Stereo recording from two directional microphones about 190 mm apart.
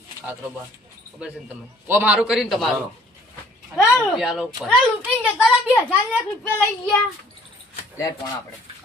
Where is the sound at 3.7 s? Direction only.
10° left (ahead or behind).